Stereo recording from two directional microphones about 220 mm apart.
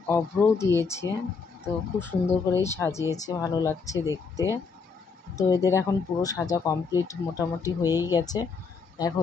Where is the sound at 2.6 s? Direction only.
10° left (ahead or behind).